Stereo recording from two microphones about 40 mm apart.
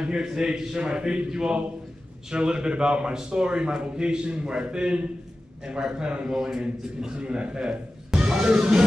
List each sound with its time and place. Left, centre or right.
0.2 s a man's voice: centre
6.3 s a man's voice: centre
8.1 s speech: centre